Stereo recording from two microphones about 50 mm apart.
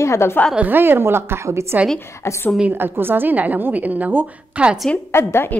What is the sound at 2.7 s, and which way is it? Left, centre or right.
A woman's voice, right.